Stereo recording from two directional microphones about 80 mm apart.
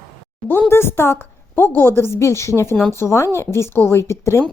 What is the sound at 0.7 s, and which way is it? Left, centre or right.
A woman's voice, left.